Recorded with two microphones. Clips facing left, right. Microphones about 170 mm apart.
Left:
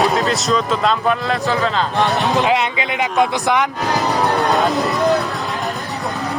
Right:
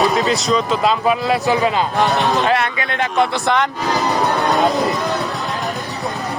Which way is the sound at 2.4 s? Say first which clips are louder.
Even; 15° left (ahead or behind).